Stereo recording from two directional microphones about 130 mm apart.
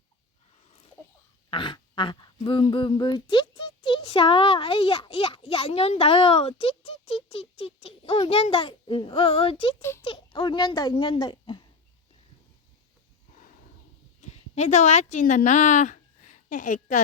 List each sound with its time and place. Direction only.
1.5 s a child's voice: 40° left (ahead or behind)
14.2 s speech: 60° left (ahead or behind); by 17.0 s 80° left